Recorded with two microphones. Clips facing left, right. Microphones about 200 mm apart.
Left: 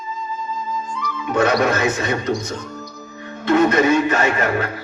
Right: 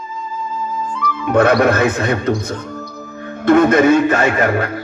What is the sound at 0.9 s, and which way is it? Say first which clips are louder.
Speech: right 6 dB; 55° right (ahead or behind).